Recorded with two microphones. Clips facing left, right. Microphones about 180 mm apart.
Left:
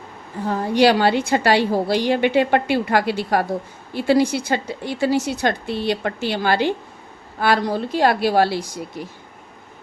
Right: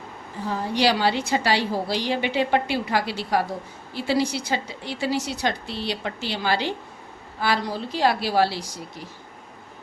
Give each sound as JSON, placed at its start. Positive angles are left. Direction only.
{"t": 0.4, "sound": "a woman's voice", "side_deg": 55}